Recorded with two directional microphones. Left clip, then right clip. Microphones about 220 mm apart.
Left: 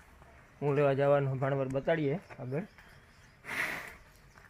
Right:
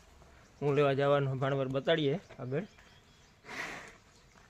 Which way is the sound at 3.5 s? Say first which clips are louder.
Left 6 dB; 35° left (ahead or behind).